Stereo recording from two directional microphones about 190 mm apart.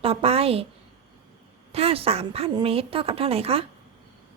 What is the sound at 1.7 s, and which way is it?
A woman's voice, 30° right (ahead or behind).